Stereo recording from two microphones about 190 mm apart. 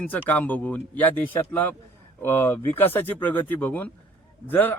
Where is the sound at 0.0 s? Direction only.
10° left (ahead or behind).